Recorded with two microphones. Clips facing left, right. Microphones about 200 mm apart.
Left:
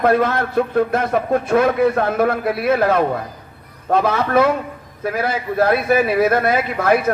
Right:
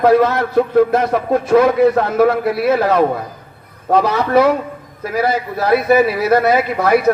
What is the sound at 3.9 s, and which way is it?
A man's voice, 50° left (ahead or behind).